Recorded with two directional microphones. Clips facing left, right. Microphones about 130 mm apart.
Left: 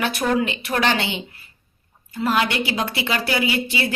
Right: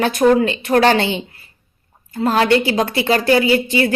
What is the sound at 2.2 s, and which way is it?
Speech, 35° right (ahead or behind).